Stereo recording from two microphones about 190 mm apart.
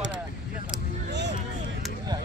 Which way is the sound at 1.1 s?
65° right (ahead or behind).